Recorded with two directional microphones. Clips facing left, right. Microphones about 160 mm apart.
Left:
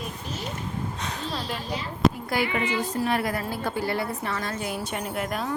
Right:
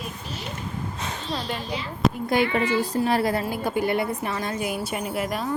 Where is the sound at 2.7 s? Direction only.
35° right (ahead or behind).